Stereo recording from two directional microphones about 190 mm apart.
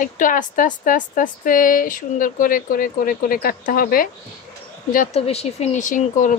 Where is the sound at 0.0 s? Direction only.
45° left (ahead or behind).